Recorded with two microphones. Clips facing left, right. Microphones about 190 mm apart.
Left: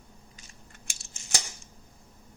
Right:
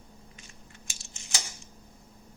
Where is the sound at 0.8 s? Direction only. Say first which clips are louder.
Right 1 dB; 60° left (ahead or behind).